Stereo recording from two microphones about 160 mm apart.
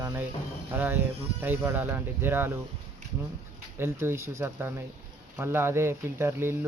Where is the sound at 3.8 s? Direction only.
15° right (ahead or behind).